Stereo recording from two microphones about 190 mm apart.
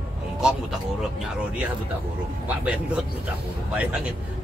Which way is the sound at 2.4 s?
5° right (ahead or behind).